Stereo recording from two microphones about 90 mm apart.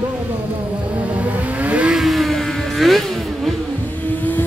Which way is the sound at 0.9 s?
15° right (ahead or behind).